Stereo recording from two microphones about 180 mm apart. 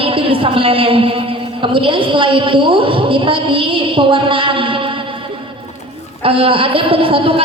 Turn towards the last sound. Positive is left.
turn(degrees=-30)  # may be behind; listen again after turning